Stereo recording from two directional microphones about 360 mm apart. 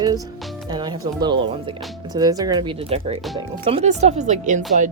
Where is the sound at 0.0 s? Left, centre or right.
Centre.